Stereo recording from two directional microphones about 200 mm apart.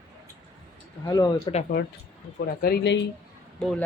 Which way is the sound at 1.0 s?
20° left (ahead or behind).